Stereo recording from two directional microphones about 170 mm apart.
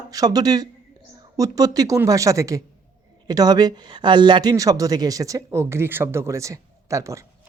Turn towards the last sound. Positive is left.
turn(degrees=-20)  # may be behind; listen again after turning